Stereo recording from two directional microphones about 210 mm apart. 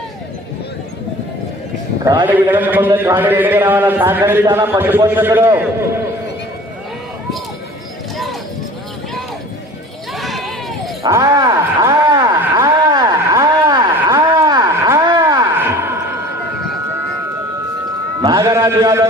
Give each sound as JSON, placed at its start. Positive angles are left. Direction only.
{"t": 2.2, "sound": "a man's voice", "side_deg": -10}
{"t": 10.2, "sound": "a sound", "side_deg": 0}
{"t": 11.0, "sound": "wail", "side_deg": -15}
{"t": 18.2, "sound": "music", "side_deg": -15}